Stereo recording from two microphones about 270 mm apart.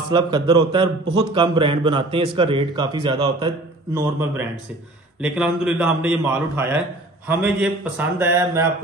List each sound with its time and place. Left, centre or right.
0.1 s a man's voice: centre